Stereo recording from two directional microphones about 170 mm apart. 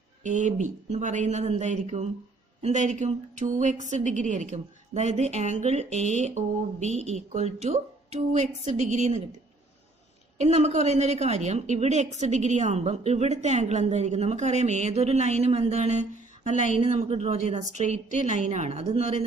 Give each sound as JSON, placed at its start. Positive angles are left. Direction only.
{"t": 0.2, "sound": "a woman's voice", "side_deg": -45}
{"t": 10.3, "sound": "a woman's voice", "side_deg": -40}
{"t": 16.5, "sound": "speech", "side_deg": 50}
{"t": 16.8, "sound": "a woman's voice", "side_deg": -40}